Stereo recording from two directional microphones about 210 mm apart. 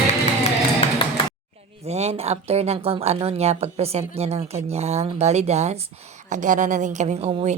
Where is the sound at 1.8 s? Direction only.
30° right (ahead or behind).